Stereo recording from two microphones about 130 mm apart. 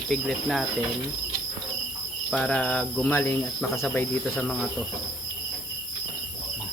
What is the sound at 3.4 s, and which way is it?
Cricket, 5° left (ahead or behind).